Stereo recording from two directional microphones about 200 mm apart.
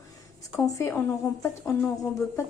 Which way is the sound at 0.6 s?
15° left (ahead or behind).